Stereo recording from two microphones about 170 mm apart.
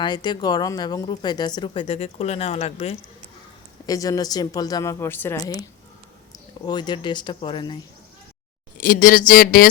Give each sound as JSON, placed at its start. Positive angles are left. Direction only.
{"t": 0.0, "sound": "speech", "side_deg": 25}
{"t": 3.8, "sound": "speech", "side_deg": 20}
{"t": 6.3, "sound": "speech", "side_deg": 25}
{"t": 8.8, "sound": "speech", "side_deg": 55}